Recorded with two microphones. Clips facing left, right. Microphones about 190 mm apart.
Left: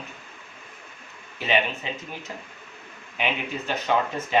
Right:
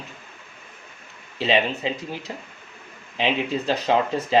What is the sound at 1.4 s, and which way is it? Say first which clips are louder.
Speech: right 3 dB; 30° right (ahead or behind).